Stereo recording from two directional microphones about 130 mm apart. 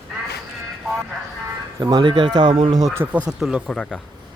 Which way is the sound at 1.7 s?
35° right (ahead or behind).